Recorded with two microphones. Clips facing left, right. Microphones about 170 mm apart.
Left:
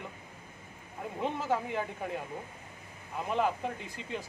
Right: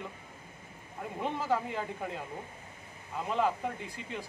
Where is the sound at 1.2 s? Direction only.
15° left (ahead or behind).